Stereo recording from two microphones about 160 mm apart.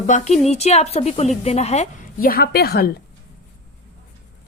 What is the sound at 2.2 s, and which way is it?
Speech, 70° left (ahead or behind).